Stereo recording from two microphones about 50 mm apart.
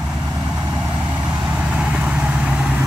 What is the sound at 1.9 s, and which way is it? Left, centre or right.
Vehicle, right.